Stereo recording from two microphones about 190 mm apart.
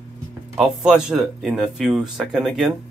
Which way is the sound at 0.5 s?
Centre (ahead or behind).